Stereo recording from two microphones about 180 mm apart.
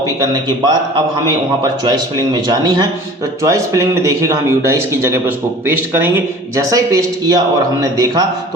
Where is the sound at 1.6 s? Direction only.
20° right (ahead or behind).